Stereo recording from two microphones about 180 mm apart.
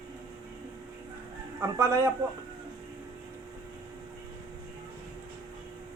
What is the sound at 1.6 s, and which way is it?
Speech, 15° right (ahead or behind).